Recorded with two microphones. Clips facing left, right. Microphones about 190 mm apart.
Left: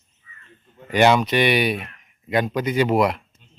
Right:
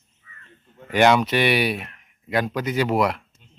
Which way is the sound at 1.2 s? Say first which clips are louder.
Left 1 dB; 5° right (ahead or behind).